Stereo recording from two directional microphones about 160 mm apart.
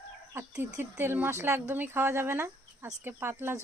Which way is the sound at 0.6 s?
15° right (ahead or behind).